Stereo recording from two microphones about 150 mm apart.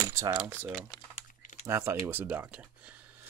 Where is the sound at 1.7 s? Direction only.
15° right (ahead or behind).